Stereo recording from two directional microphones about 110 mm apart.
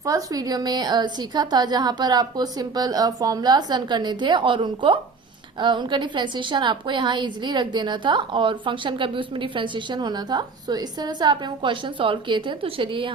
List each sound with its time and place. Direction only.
0.0 s a woman's voice: 35° right (ahead or behind); by 13.1 s 50° right (ahead or behind)